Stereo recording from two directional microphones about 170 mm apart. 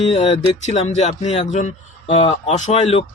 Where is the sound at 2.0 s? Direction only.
35° left (ahead or behind).